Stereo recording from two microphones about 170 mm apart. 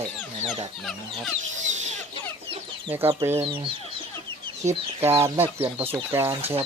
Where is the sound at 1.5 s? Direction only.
45° right (ahead or behind).